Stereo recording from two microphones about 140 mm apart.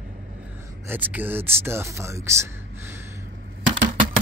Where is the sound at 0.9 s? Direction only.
15° right (ahead or behind).